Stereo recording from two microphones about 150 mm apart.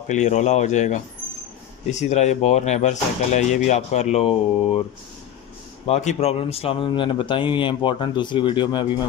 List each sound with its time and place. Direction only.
0.1 s speech: 50° left (ahead or behind)
5.9 s a man's voice: 45° left (ahead or behind)